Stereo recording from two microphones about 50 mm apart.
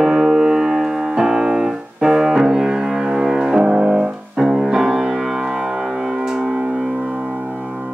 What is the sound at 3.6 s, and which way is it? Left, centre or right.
Music, right.